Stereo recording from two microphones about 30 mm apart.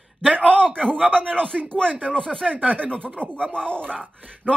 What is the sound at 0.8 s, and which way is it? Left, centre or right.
Speech, left.